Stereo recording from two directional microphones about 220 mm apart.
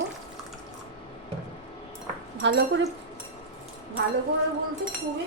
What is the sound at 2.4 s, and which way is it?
Speech, 55° right (ahead or behind).